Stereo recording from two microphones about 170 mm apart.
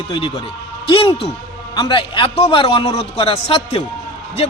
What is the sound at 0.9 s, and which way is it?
A man's voice, 30° left (ahead or behind).